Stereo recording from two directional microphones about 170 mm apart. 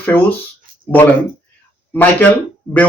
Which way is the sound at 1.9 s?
10° left (ahead or behind).